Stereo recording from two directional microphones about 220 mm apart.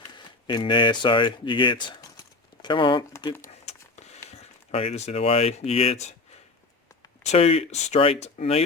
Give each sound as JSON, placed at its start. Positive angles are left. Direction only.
{"t": 0.2, "sound": "speech", "side_deg": 20}
{"t": 3.4, "sound": "a sound", "side_deg": 30}
{"t": 7.2, "sound": "speech", "side_deg": 30}